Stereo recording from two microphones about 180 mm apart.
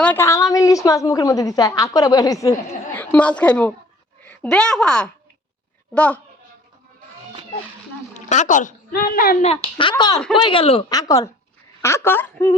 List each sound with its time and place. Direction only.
0.0 s a woman's voice: 10° left (ahead or behind)
8.1 s a woman's voice: 40° left (ahead or behind)
9.4 s a woman's voice: 30° left (ahead or behind); by 12.5 s 15° left (ahead or behind)